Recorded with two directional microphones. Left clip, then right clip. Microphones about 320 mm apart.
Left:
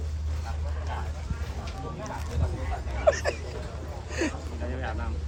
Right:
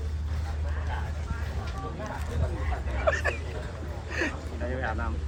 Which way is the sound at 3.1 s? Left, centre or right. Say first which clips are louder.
Left 3 dB; centre.